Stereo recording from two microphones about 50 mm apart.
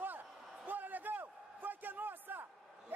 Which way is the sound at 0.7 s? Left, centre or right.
Right.